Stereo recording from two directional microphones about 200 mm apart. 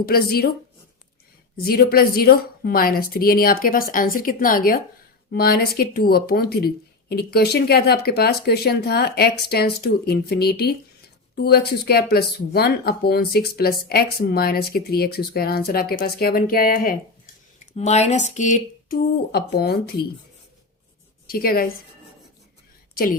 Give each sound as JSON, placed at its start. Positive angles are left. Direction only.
{"t": 0.0, "sound": "speech", "side_deg": 50}
{"t": 1.6, "sound": "speech", "side_deg": 50}
{"t": 17.6, "sound": "speech", "side_deg": 35}
{"t": 21.2, "sound": "a woman's voice", "side_deg": 50}